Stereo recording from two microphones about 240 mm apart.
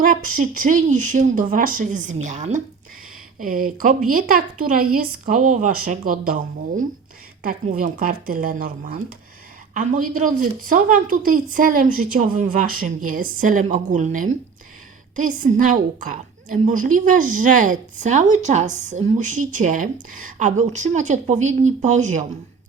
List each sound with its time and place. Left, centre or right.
0.0 s a woman's voice: right